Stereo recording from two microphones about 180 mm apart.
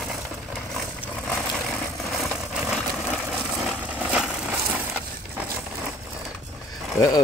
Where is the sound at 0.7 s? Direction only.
Centre (ahead or behind).